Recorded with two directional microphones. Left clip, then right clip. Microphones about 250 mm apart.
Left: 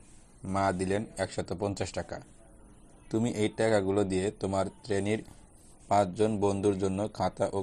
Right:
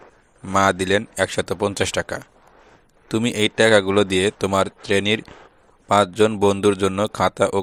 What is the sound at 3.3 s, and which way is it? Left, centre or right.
Speech, right.